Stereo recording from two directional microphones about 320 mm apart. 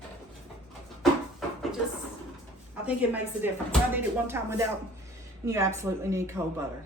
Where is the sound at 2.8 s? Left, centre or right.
Centre.